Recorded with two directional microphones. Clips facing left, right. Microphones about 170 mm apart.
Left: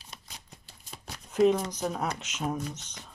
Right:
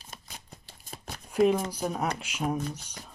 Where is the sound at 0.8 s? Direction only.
50° right (ahead or behind).